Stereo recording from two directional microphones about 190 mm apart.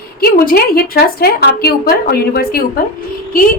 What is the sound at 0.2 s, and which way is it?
A woman's voice, 55° left (ahead or behind).